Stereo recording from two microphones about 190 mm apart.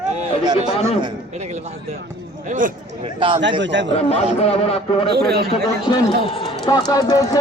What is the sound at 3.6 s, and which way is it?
Speech, 70° right (ahead or behind).